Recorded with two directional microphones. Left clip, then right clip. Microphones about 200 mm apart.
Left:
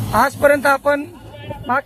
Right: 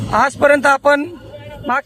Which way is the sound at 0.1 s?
25° right (ahead or behind).